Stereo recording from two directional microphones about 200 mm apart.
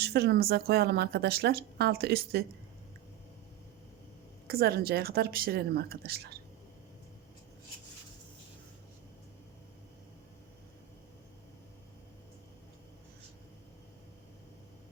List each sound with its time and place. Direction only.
0.0 s a woman's voice: 55° right (ahead or behind)
4.4 s a woman's voice: 50° right (ahead or behind)